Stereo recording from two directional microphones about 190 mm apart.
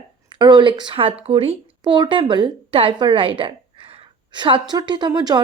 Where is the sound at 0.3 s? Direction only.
25° right (ahead or behind).